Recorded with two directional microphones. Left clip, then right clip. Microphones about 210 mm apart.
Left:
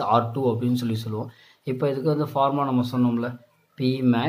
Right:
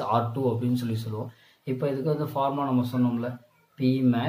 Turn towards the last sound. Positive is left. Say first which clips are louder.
# left 2 dB
turn(degrees=35)  # may be behind; listen again after turning